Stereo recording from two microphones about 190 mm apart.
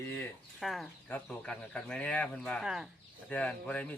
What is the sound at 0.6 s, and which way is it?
Speech, centre (ahead or behind).